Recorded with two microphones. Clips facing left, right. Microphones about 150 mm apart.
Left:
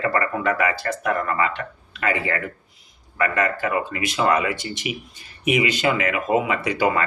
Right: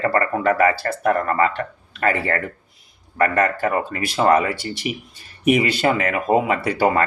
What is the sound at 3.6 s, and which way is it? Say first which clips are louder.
Speech: right 2 dB; 40° right (ahead or behind).